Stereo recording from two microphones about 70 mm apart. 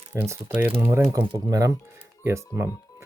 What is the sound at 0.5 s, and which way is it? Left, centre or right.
Speech, right.